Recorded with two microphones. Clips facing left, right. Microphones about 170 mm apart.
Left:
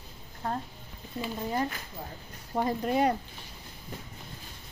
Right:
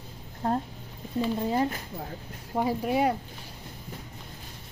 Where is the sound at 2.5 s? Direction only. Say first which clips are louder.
Right 1 dB; 10° right (ahead or behind).